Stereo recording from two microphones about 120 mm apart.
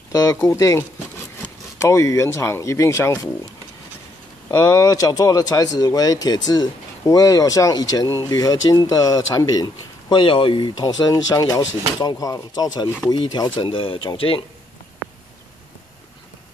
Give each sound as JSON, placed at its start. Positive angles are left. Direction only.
{"t": 0.1, "sound": "a sound", "side_deg": 30}
{"t": 0.4, "sound": "speech", "side_deg": 25}
{"t": 4.5, "sound": "speech", "side_deg": 30}